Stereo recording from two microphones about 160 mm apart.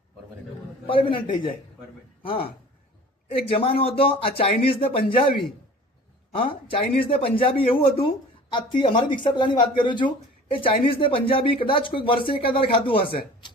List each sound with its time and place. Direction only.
0.9 s speech: 35° left (ahead or behind)
6.5 s speech: 35° left (ahead or behind)